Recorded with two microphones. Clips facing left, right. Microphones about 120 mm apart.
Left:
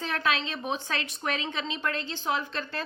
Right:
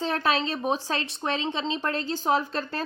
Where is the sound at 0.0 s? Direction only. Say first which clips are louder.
Right 4 dB; 35° right (ahead or behind).